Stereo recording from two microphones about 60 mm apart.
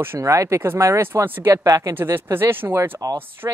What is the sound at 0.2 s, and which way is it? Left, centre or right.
Speech, right.